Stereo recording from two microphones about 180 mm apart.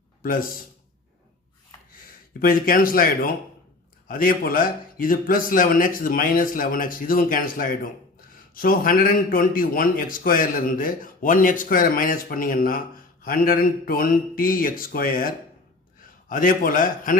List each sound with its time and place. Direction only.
0.2 s a man's voice: 50° left (ahead or behind)
2.4 s a man's voice: 55° left (ahead or behind)
16.3 s a man's voice: 50° left (ahead or behind)